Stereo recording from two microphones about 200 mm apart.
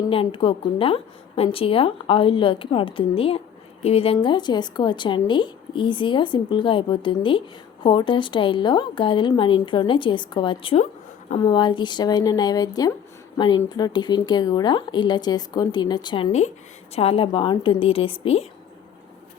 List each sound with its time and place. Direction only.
0.0 s a woman's voice: 25° left (ahead or behind)